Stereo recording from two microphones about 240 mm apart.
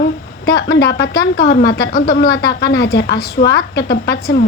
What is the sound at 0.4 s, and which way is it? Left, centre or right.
A woman's voice, left.